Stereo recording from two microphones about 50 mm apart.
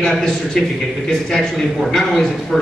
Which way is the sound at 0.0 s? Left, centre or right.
Centre.